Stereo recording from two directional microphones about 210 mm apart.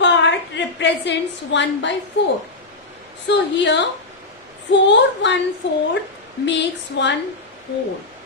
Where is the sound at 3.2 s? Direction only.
55° left (ahead or behind).